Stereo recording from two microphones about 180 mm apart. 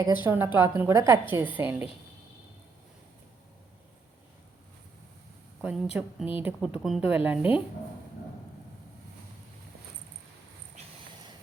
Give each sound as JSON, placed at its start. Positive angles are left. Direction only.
{"t": 0.0, "sound": "a woman's voice", "side_deg": -15}
{"t": 5.6, "sound": "a woman's voice", "side_deg": -5}